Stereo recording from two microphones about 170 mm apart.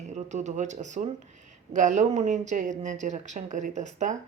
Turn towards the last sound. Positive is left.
turn(degrees=-45)  # may be behind; listen again after turning